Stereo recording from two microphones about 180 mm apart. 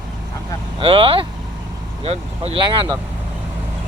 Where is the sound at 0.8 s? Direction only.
30° right (ahead or behind).